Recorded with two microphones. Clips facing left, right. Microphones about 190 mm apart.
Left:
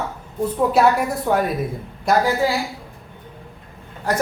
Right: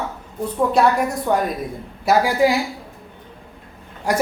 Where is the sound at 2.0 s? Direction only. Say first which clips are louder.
Right 2 dB; 10° right (ahead or behind).